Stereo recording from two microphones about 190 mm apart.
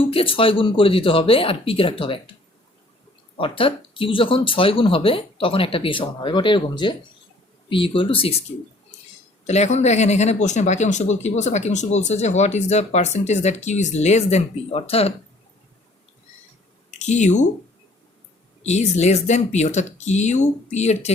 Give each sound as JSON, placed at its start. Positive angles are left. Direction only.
{"t": 0.1, "sound": "speech", "side_deg": 30}
{"t": 3.3, "sound": "speech", "side_deg": 30}
{"t": 9.4, "sound": "speech", "side_deg": 35}
{"t": 16.9, "sound": "speech", "side_deg": 35}
{"t": 18.6, "sound": "speech", "side_deg": 35}